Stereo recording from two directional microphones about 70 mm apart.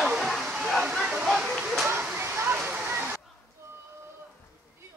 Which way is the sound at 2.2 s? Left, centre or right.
Right.